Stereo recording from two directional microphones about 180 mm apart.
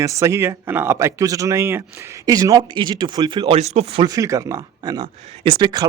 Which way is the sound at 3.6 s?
35° right (ahead or behind).